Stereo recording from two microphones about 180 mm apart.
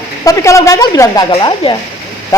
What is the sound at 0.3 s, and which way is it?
Speech, 15° left (ahead or behind).